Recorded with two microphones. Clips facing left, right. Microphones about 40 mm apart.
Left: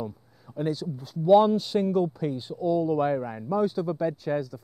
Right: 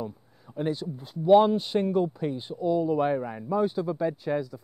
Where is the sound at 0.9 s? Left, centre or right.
Right.